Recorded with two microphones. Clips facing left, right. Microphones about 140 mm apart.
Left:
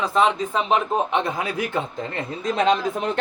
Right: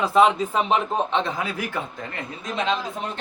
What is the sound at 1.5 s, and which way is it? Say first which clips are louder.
Speech: left 4 dB; 25° left (ahead or behind).